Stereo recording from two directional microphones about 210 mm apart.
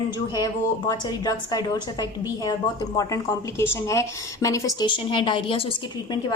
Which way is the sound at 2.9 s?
15° left (ahead or behind).